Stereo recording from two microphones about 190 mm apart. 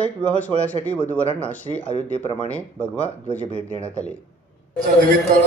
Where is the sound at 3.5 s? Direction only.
35° right (ahead or behind).